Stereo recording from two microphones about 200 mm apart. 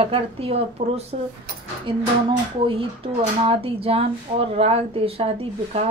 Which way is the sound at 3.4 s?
30° right (ahead or behind).